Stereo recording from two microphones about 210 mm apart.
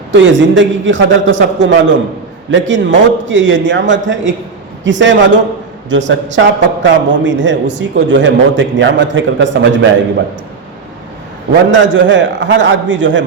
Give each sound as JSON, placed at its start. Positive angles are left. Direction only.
{"t": 0.1, "sound": "a man's voice", "side_deg": -60}
{"t": 11.7, "sound": "a man's voice", "side_deg": -60}